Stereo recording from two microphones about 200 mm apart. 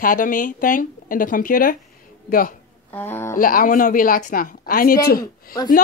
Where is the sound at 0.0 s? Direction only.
45° left (ahead or behind).